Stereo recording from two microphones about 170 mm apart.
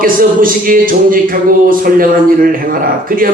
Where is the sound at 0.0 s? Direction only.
55° right (ahead or behind).